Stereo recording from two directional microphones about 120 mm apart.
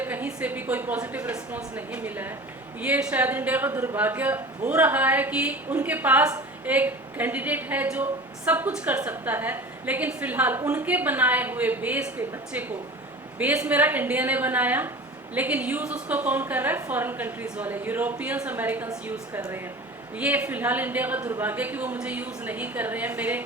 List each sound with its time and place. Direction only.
0.0 s speech: 15° right (ahead or behind)
20.1 s speech: 15° right (ahead or behind)